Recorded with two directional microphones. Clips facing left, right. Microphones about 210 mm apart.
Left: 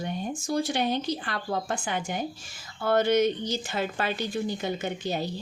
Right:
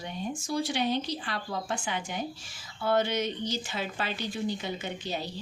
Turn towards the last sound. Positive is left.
turn(degrees=50)  # may be behind; listen again after turning